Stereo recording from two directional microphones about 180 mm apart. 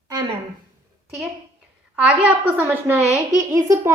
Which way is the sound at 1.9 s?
5° right (ahead or behind).